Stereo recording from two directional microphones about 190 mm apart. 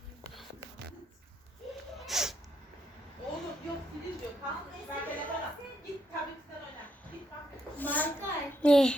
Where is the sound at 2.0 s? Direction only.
Centre (ahead or behind).